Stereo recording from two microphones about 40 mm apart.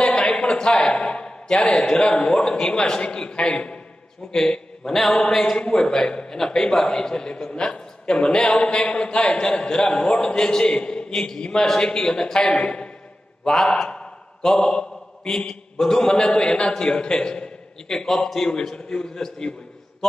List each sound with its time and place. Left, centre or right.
0.0 s a sound: centre
2.1 s a man's voice: left
4.9 s a sound: centre
5.3 s a man's voice: centre
11.1 s a man's voice: centre
12.6 s a man's voice: left
13.4 s a man's voice: centre